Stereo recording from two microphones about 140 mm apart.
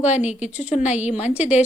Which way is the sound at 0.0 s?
55° left (ahead or behind).